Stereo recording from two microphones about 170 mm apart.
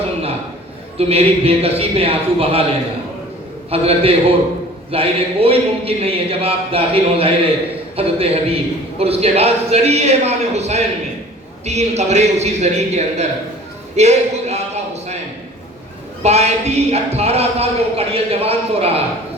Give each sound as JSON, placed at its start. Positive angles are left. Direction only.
{"t": 0.9, "sound": "a man's voice", "side_deg": -35}
{"t": 3.7, "sound": "a man's voice", "side_deg": -35}
{"t": 13.9, "sound": "a sound", "side_deg": -40}
{"t": 16.2, "sound": "a man's voice", "side_deg": -40}